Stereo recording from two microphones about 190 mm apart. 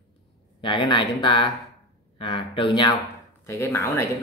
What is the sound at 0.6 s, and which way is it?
Speech, 25° left (ahead or behind).